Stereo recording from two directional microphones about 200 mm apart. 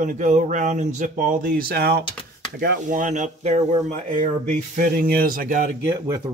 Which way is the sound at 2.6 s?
40° right (ahead or behind).